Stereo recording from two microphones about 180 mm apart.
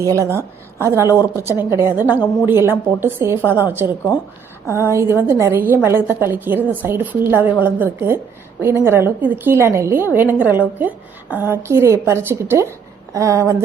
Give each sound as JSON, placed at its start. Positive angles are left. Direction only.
{"t": 0.0, "sound": "a woman's voice", "side_deg": -15}